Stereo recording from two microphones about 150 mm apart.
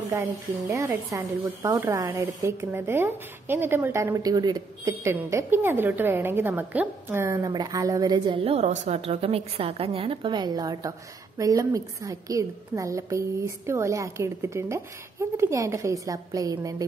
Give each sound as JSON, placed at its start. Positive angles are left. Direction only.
{"t": 0.1, "sound": "speech", "side_deg": -20}